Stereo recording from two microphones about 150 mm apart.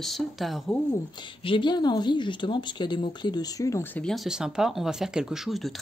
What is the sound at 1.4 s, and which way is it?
Speech, 30° left (ahead or behind).